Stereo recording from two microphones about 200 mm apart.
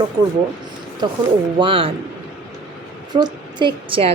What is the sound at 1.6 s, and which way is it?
Speech, 25° right (ahead or behind).